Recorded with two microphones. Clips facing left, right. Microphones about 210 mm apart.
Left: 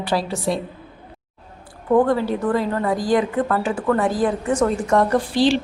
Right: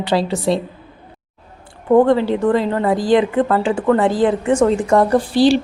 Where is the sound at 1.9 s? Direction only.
25° right (ahead or behind).